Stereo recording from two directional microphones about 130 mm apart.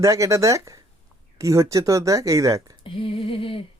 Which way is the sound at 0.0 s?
25° right (ahead or behind).